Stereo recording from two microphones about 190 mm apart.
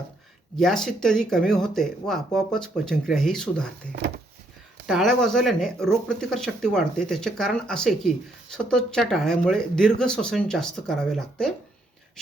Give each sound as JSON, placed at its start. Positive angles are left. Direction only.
{"t": 0.5, "sound": "speech", "side_deg": 0}
{"t": 4.0, "sound": "speech", "side_deg": -60}
{"t": 4.9, "sound": "speech", "side_deg": 0}